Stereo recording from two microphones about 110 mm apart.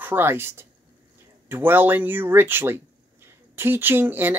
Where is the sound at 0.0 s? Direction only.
20° right (ahead or behind).